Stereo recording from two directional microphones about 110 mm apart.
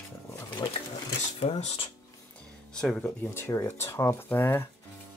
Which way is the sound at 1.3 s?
80° left.